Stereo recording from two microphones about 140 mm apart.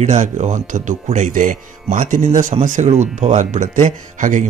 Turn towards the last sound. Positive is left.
turn(degrees=-65)  # may be behind; listen again after turning